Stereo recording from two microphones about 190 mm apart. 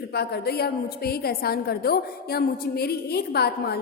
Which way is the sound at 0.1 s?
60° left (ahead or behind).